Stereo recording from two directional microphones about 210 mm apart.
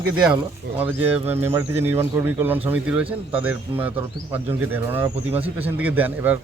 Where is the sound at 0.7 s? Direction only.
10° right (ahead or behind).